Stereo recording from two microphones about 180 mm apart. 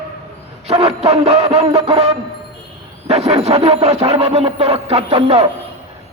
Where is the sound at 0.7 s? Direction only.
35° right (ahead or behind).